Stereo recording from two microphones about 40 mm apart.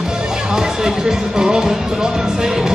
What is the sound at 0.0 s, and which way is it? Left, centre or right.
Speech, centre.